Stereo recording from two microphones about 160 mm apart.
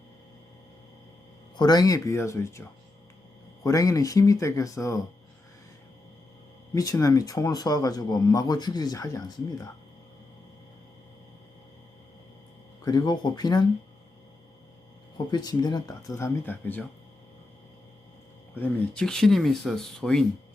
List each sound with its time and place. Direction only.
1.5 s speech: 25° left (ahead or behind)
6.7 s speech: 20° left (ahead or behind)
12.8 s speech: 25° left (ahead or behind)
15.3 s speech: 25° left (ahead or behind)
18.5 s speech: 10° left (ahead or behind)